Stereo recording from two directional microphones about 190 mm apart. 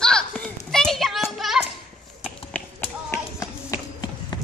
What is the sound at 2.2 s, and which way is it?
Tap, 10° left (ahead or behind).